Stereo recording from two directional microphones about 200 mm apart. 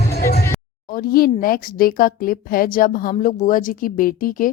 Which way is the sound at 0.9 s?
45° left (ahead or behind).